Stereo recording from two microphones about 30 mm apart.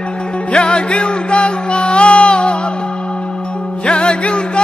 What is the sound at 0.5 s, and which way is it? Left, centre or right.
Music, left.